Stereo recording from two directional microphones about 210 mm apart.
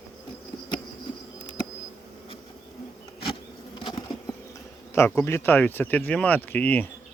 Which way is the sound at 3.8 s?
20° left (ahead or behind).